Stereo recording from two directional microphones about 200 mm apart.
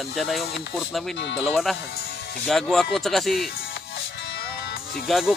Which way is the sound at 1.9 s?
50° left (ahead or behind).